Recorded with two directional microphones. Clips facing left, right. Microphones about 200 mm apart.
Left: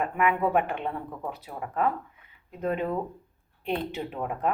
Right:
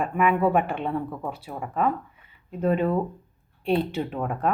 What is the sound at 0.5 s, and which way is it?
Speech, 15° left (ahead or behind).